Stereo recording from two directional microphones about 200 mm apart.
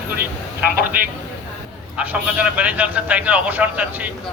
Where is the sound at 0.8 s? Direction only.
45° right (ahead or behind).